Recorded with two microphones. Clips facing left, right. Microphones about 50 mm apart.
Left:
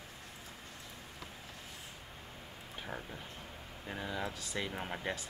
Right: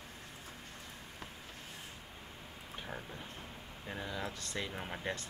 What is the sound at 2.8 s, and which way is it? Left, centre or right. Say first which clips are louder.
Speech: left 2 dB; centre.